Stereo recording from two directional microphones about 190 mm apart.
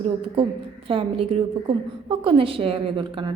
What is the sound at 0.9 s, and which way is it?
A woman's voice, 30° right (ahead or behind).